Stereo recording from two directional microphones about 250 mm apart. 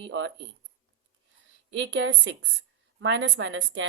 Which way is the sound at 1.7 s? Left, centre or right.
Right.